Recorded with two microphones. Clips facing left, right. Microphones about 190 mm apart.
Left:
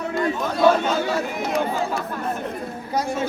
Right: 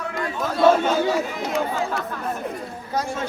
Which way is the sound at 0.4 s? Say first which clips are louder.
Right 2 dB; 5° right (ahead or behind).